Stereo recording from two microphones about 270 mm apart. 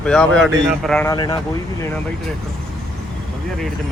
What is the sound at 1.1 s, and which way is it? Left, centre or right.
Speech, centre.